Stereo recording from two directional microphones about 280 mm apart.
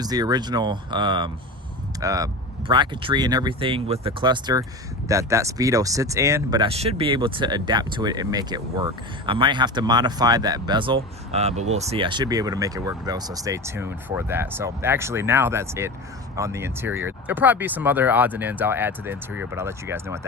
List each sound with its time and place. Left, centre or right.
0.0 s speech: centre